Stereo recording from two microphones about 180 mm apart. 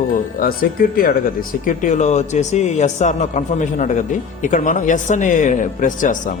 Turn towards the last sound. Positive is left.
turn(degrees=45)  # may be behind; listen again after turning